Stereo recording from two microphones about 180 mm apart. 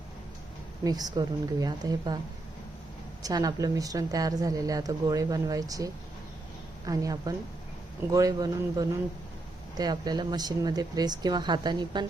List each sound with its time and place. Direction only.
0.9 s speech: 20° right (ahead or behind)
3.2 s speech: 20° right (ahead or behind)